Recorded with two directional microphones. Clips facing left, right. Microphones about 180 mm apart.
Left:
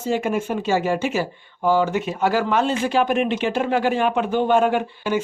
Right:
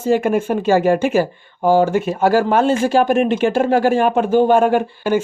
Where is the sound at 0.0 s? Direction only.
55° right (ahead or behind).